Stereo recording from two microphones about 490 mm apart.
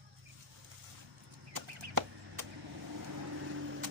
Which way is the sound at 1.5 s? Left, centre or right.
Right.